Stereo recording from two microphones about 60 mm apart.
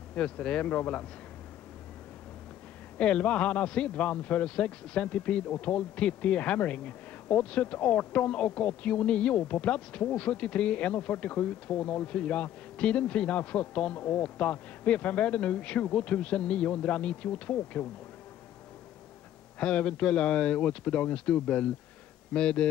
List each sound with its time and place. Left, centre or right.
0.1 s speech: left
3.0 s speech: centre
19.6 s speech: centre